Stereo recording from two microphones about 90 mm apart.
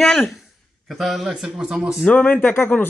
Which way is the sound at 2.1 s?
20° left (ahead or behind).